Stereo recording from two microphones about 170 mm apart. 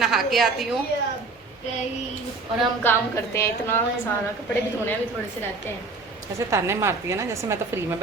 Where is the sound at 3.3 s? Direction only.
15° left (ahead or behind).